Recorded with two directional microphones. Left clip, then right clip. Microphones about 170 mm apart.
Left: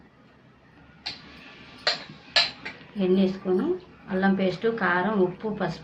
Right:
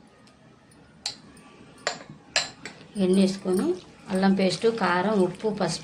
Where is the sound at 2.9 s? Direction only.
35° right (ahead or behind).